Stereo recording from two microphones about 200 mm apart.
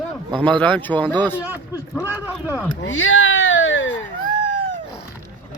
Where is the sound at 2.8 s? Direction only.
70° left (ahead or behind).